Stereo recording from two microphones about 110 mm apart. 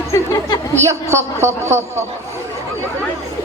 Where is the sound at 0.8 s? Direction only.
25° right (ahead or behind).